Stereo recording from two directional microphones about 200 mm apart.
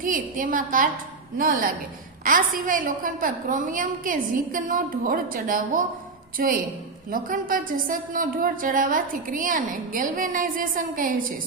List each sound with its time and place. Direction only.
0.0 s a woman's voice: 45° right (ahead or behind)